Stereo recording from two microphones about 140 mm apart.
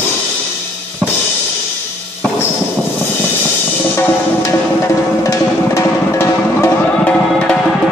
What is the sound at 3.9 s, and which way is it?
Music, 20° left (ahead or behind).